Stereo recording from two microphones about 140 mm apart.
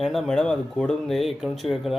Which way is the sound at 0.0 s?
Centre (ahead or behind).